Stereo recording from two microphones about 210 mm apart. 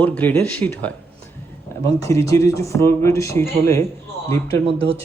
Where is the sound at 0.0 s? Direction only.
5° left (ahead or behind).